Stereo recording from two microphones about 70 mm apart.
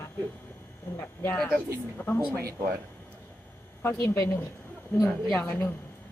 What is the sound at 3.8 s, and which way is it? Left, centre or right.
Speech, left.